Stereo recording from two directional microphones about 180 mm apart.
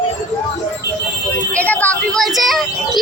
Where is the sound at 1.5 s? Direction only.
10° left (ahead or behind).